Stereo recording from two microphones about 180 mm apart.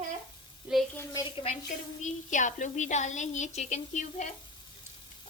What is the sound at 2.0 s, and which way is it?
A woman's voice, 45° left (ahead or behind).